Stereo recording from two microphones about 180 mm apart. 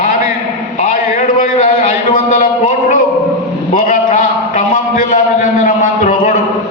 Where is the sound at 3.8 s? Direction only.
45° left (ahead or behind).